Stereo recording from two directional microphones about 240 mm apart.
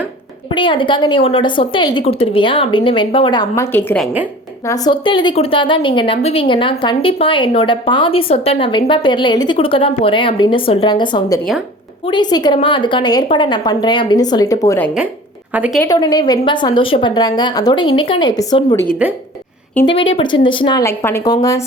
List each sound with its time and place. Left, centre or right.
0.5 s a woman's voice: left; by 4.3 s centre
4.6 s a woman's voice: centre
15.5 s speech: centre
15.8 s a woman's voice: centre
18.9 s speech: centre
19.7 s a woman's voice: centre